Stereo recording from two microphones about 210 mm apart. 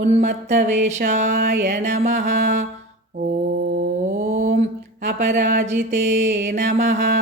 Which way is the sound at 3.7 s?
35° right (ahead or behind).